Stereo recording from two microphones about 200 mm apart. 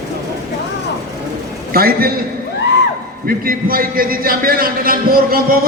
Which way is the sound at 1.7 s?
45° right (ahead or behind).